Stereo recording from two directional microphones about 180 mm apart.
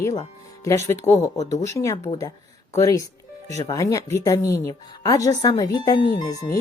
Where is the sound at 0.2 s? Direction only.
15° left (ahead or behind).